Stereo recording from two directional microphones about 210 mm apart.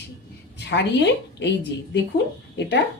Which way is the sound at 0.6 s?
55° left (ahead or behind).